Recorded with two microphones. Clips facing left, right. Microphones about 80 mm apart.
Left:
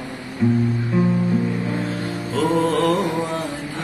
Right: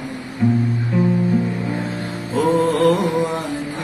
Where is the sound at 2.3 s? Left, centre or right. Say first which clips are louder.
Right 2 dB; right.